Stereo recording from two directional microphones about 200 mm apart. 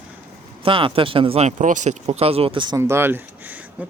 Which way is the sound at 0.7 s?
25° right (ahead or behind).